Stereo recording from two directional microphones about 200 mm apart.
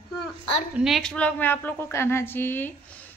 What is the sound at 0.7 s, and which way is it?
Speech, centre (ahead or behind).